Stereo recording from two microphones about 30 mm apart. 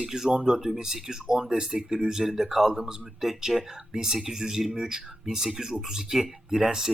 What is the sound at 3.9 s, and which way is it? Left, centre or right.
Speech, centre.